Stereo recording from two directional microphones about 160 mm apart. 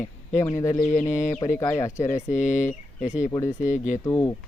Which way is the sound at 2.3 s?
50° left (ahead or behind).